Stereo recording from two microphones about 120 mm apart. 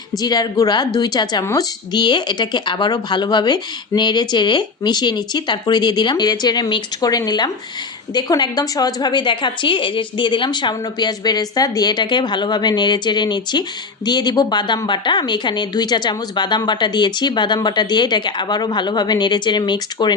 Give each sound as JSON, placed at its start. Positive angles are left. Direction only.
{"t": 0.2, "sound": "a woman's voice", "side_deg": 35}